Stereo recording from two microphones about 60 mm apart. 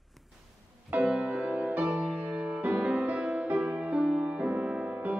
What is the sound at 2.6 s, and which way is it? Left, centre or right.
Music, centre.